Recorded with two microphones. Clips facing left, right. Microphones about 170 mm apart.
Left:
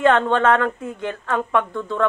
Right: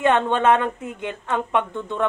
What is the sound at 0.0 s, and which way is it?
Speech, 20° right (ahead or behind).